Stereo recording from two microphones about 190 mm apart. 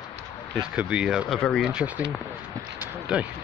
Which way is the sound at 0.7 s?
5° right (ahead or behind).